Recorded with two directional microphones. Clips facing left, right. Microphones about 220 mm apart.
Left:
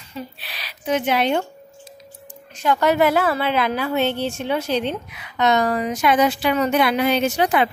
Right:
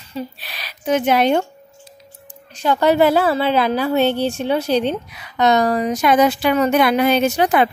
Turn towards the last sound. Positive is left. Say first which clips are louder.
# right 3 dB
turn(degrees=-45)  # may be behind; listen again after turning